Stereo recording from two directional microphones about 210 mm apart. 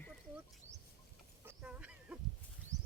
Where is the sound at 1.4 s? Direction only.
5° right (ahead or behind).